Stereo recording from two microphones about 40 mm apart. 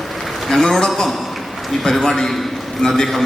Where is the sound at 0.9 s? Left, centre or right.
Centre.